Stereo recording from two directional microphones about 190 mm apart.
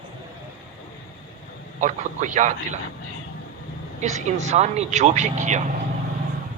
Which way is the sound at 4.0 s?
35° right (ahead or behind).